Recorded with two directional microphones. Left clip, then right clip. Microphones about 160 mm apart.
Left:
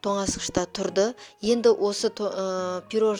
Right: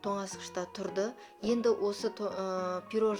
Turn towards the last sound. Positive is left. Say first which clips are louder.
# left 7 dB
turn(degrees=50)  # may be behind; listen again after turning